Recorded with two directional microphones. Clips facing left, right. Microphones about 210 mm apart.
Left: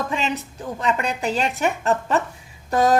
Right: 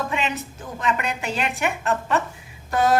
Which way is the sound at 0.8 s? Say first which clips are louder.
Left 2 dB; 35° left (ahead or behind).